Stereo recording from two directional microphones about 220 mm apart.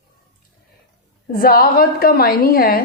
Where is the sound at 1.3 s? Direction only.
40° left (ahead or behind).